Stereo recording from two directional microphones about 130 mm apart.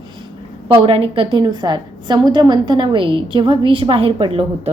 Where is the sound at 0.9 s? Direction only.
45° right (ahead or behind).